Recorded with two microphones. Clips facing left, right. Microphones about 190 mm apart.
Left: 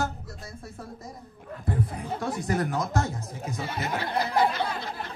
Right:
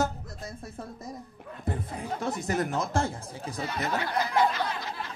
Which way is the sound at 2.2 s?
25° right (ahead or behind).